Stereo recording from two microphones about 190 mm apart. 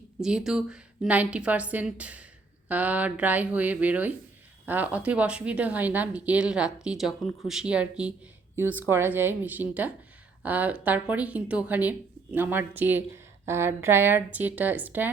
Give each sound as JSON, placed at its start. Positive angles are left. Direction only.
{"t": 0.2, "sound": "a woman's voice", "side_deg": -5}